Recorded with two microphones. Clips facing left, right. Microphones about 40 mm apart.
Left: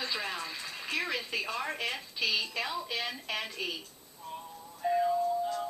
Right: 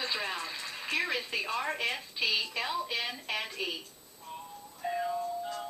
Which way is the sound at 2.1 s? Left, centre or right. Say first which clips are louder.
Even; right.